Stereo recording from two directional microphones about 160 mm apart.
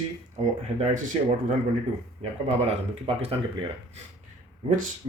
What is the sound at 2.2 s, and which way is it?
Speech, 40° right (ahead or behind).